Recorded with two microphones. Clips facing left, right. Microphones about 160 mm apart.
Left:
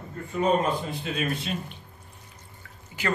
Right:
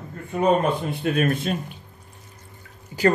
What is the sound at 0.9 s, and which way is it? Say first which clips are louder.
Speech: right 7 dB; 55° right (ahead or behind).